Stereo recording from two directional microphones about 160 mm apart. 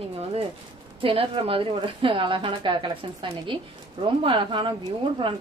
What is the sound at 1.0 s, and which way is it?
A woman's voice, 35° right (ahead or behind).